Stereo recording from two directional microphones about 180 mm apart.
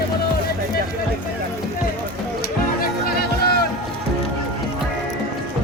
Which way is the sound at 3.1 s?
60° left (ahead or behind).